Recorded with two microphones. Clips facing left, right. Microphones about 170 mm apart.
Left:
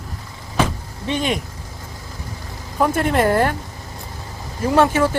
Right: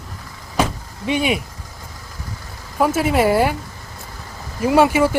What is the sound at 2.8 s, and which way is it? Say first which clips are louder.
Speech: right 1 dB; 5° right (ahead or behind).